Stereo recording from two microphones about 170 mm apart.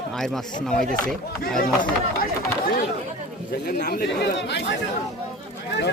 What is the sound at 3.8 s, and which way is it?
Speech, 80° left.